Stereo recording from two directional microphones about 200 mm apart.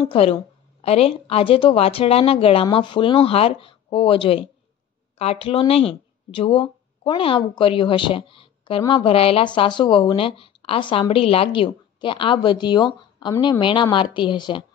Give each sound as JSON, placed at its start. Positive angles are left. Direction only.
{"t": 0.0, "sound": "speech", "side_deg": 30}